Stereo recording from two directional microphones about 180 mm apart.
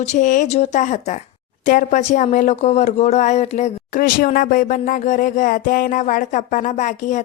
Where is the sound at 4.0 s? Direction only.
50° left (ahead or behind).